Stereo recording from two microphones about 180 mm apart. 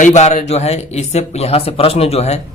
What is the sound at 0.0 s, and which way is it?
A man's voice, 40° left (ahead or behind).